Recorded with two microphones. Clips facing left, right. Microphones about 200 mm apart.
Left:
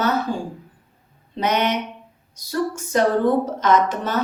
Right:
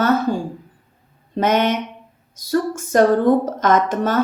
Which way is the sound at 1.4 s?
50° right (ahead or behind).